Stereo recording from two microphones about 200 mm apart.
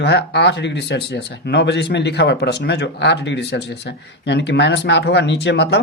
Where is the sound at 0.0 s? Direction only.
55° left (ahead or behind).